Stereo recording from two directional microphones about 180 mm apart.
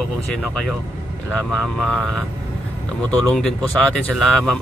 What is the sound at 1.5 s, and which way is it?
Speech, centre (ahead or behind).